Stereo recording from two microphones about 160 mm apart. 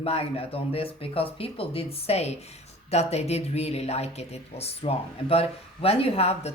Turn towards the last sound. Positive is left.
turn(degrees=40)  # may be behind; listen again after turning